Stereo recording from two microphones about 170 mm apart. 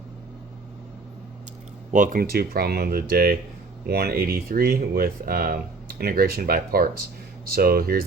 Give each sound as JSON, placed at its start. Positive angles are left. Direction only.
{"t": 1.9, "sound": "speech", "side_deg": -50}